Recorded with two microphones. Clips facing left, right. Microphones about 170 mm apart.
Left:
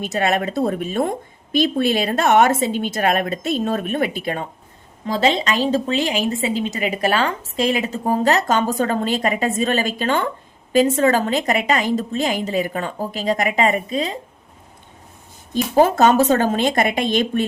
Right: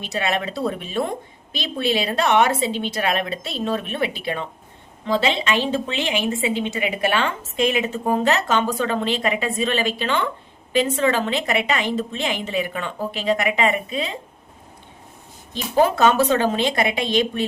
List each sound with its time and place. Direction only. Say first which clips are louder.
0.0 s a woman's voice: left 4 dB; 45° left (ahead or behind)
15.5 s a woman's voice: left 3 dB; 45° left (ahead or behind)